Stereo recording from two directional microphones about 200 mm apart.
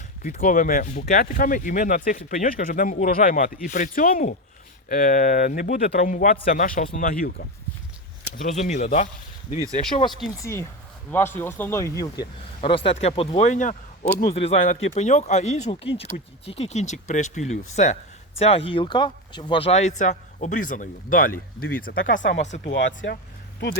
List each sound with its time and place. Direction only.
0.2 s speech: 45° left (ahead or behind)
8.4 s speech: 35° left (ahead or behind)
10.4 s speech: 15° left (ahead or behind); by 22.3 s 40° left (ahead or behind)
22.6 s speech: 65° left (ahead or behind)